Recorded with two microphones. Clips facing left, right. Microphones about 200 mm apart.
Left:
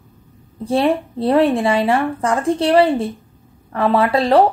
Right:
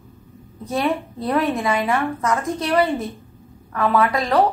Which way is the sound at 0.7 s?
30° left (ahead or behind).